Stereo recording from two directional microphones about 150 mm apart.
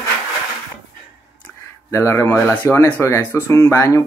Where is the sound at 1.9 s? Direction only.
20° left (ahead or behind).